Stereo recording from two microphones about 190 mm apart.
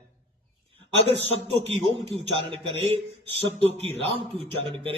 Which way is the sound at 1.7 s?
30° right (ahead or behind).